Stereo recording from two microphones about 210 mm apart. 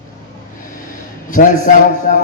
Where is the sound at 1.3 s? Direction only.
40° left (ahead or behind).